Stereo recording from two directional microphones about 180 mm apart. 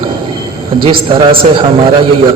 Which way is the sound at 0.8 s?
30° right (ahead or behind).